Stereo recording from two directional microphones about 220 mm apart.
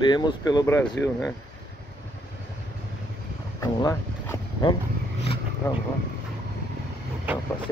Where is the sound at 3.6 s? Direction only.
15° left (ahead or behind).